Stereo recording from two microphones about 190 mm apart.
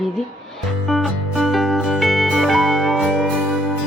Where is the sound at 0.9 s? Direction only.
Centre (ahead or behind).